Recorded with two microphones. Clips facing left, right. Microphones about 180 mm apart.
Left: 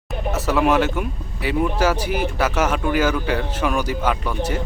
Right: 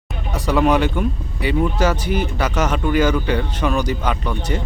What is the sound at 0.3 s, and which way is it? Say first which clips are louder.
Speech: right 2 dB; 5° left (ahead or behind).